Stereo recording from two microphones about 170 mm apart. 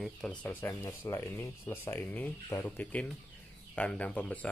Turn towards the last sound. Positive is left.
turn(degrees=10)  # may be behind; listen again after turning